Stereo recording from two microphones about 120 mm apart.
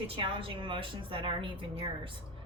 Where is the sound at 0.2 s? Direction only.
50° right (ahead or behind).